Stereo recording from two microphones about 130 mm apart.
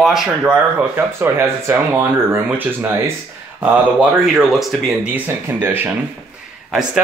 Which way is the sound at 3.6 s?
5° right (ahead or behind).